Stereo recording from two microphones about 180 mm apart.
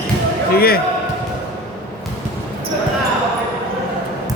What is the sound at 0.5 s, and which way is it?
Speech, 55° left (ahead or behind).